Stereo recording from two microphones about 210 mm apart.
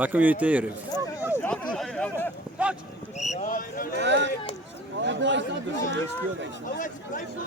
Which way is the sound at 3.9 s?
60° right (ahead or behind).